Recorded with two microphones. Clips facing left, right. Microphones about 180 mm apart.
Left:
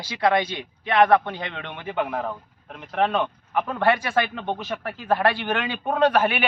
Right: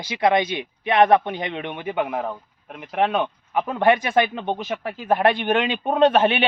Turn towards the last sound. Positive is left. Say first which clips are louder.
# right 3 dB
turn(degrees=-25)  # may be behind; listen again after turning